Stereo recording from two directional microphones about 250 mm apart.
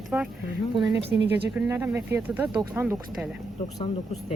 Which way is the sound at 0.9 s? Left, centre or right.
Right.